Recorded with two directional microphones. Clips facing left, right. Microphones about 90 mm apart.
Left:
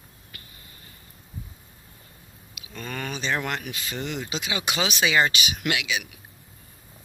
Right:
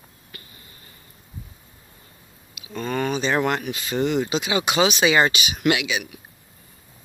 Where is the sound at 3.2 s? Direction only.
35° right (ahead or behind).